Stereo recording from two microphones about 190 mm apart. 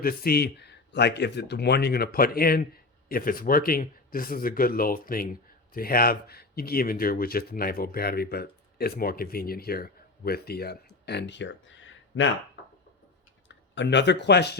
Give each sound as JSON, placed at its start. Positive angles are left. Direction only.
{"t": 0.0, "sound": "speech", "side_deg": 50}
{"t": 13.5, "sound": "speech", "side_deg": 70}